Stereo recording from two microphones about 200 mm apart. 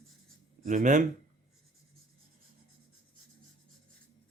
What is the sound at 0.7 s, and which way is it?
Speech, 40° right (ahead or behind).